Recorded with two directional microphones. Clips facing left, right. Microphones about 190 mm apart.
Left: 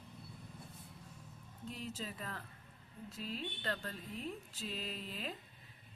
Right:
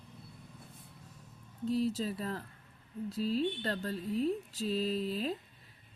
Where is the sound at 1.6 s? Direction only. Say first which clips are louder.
Right 13 dB; 35° right (ahead or behind).